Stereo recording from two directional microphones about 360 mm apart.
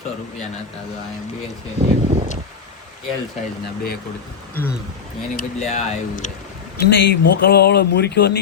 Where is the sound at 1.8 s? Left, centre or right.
Centre.